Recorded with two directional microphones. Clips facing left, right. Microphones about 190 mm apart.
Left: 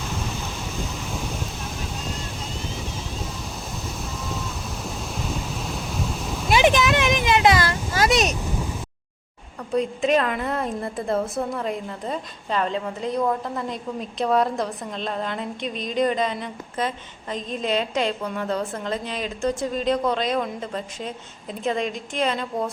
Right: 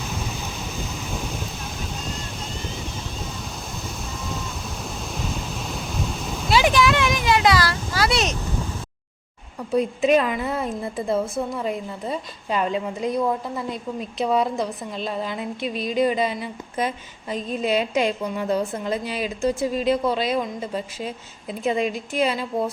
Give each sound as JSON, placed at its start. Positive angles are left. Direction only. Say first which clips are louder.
{"t": 5.1, "sound": "waves", "louder": "even", "side_deg": 0}
{"t": 6.5, "sound": "a sound", "louder": "even", "side_deg": 20}
{"t": 9.7, "sound": "a woman's voice", "louder": "right 2 dB", "side_deg": -5}